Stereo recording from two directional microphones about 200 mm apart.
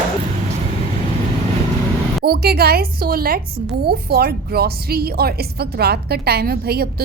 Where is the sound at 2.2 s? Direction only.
50° right (ahead or behind).